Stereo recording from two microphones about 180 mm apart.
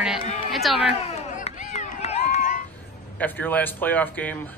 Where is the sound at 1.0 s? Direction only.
40° left (ahead or behind).